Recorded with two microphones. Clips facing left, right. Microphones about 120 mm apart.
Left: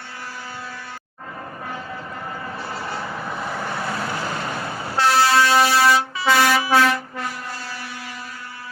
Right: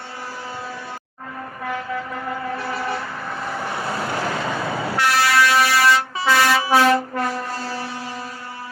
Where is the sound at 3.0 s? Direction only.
10° left (ahead or behind).